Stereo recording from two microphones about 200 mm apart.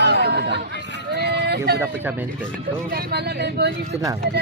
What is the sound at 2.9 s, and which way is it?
Speech, 55° right (ahead or behind).